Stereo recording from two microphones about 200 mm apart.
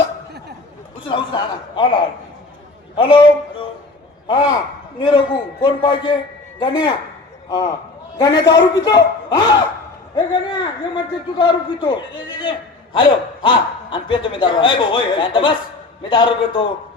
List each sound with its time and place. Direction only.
1.0 s a man's voice: 25° left (ahead or behind)
8.2 s a man's voice: 20° left (ahead or behind)